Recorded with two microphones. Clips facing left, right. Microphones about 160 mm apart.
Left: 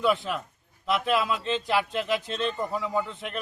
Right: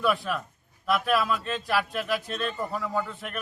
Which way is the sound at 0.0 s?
20° left (ahead or behind).